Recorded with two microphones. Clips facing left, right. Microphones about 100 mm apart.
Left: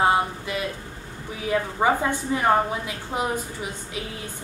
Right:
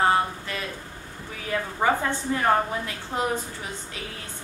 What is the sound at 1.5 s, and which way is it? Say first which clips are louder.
A woman's voice: left 2 dB; 15° left (ahead or behind).